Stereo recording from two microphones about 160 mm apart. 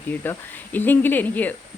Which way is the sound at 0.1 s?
10° left (ahead or behind).